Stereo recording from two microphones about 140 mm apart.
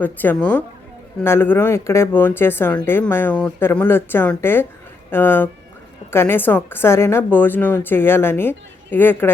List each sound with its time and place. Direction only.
0.0 s a woman's voice: 10° left (ahead or behind)